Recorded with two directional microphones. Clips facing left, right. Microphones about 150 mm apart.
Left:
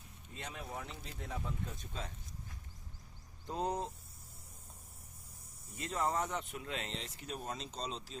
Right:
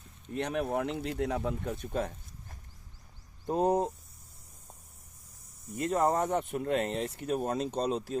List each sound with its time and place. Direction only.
0.3 s speech: 70° right (ahead or behind); by 3.9 s 50° right (ahead or behind)
5.7 s speech: 50° right (ahead or behind)